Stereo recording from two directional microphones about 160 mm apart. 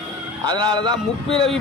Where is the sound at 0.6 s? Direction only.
25° right (ahead or behind).